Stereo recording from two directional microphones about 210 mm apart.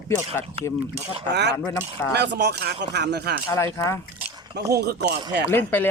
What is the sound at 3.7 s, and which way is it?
Speech, 15° left (ahead or behind).